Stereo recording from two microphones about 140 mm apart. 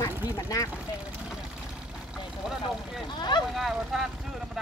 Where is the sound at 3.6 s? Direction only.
Centre (ahead or behind).